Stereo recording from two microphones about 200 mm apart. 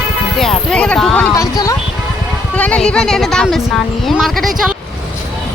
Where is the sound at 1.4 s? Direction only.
15° left (ahead or behind).